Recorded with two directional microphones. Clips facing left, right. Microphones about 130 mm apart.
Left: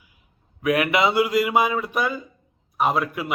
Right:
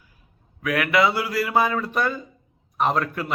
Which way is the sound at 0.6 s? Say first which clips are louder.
Left 1 dB; 20° left (ahead or behind).